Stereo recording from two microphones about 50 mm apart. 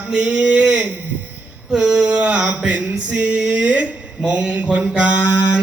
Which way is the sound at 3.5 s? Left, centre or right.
Right.